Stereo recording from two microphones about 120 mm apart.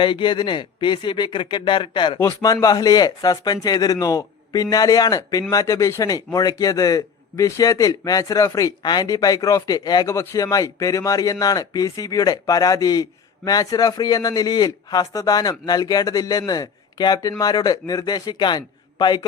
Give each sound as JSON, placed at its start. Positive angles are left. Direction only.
{"t": 0.0, "sound": "speech", "side_deg": 40}
{"t": 2.1, "sound": "speech", "side_deg": 25}